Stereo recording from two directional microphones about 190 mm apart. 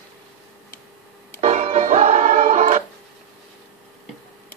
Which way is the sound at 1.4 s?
35° right (ahead or behind).